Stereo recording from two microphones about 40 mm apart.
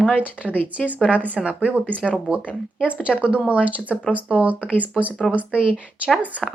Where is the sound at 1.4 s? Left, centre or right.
Centre.